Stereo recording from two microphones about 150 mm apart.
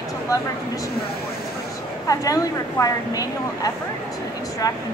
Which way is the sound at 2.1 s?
20° left (ahead or behind).